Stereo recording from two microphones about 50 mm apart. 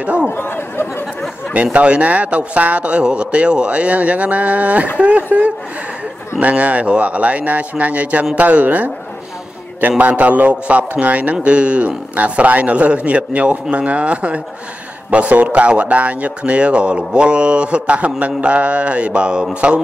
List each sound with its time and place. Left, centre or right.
0.0 s speech: right
0.3 s speech: left
1.5 s a man's voice: right